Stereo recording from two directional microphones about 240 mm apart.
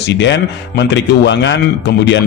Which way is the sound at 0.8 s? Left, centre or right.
Left.